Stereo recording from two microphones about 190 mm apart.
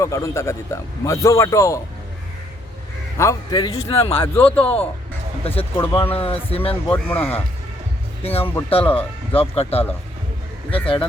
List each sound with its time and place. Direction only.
0.0 s a man's voice: 15° left (ahead or behind)
3.2 s a man's voice: 20° left (ahead or behind)
3.8 s speech: 30° left (ahead or behind)
4.4 s a man's voice: 10° left (ahead or behind)
5.4 s speech: 30° left (ahead or behind)
6.8 s a man's voice: 10° left (ahead or behind)
8.2 s speech: 30° left (ahead or behind)